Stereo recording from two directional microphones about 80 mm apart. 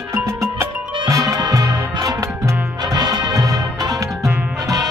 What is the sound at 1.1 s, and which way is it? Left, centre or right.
Music, right.